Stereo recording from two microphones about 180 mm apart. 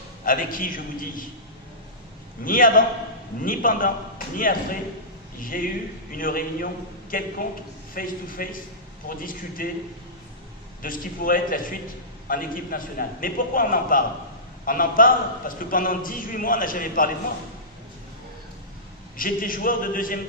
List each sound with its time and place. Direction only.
0.3 s a man's voice: 50° left (ahead or behind)
2.4 s a man's voice: 50° left (ahead or behind)
10.8 s a man's voice: 50° left (ahead or behind)
19.1 s a man's voice: 50° left (ahead or behind)